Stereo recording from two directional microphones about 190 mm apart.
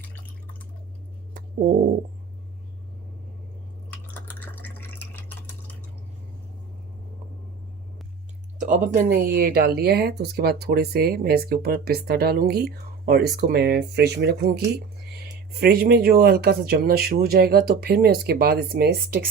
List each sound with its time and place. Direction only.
4.1 s drip: 10° left (ahead or behind)
8.6 s speech: 45° right (ahead or behind)